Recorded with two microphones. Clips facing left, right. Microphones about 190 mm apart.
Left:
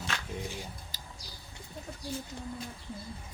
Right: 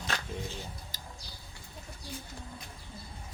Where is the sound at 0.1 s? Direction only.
40° right (ahead or behind).